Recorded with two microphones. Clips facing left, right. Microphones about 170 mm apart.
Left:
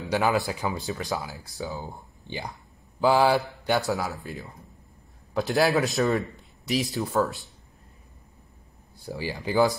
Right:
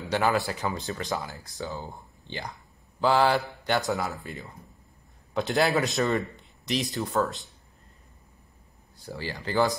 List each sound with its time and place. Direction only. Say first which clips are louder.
0.1 s a man's voice: left 1 dB; 10° left (ahead or behind)
1.8 s speech: left 1 dB; 15° left (ahead or behind)
3.0 s mantra: left 2 dB; 10° left (ahead or behind)
3.9 s a man's voice: left 1 dB; centre (ahead or behind)
9.0 s speech: left 3 dB; 15° left (ahead or behind)